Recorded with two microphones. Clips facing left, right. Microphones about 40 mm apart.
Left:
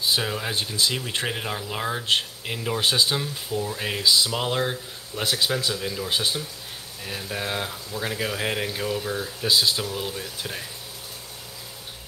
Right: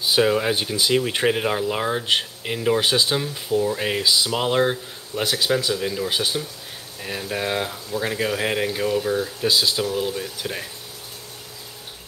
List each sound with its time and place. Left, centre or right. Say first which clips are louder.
0.1 s speech: right 10 dB; centre